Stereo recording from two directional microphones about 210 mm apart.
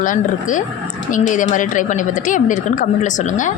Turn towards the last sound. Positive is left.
turn(degrees=35)  # may be behind; listen again after turning